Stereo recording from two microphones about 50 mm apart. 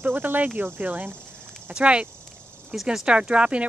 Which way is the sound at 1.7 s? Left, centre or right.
Right.